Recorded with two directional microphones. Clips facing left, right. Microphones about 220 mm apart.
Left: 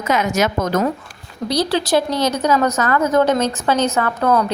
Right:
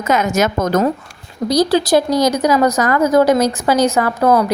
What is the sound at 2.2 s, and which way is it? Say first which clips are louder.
A woman's voice: right 3 dB; 15° right (ahead or behind).